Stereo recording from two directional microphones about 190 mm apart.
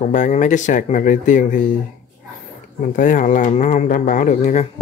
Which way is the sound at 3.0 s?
45° left (ahead or behind).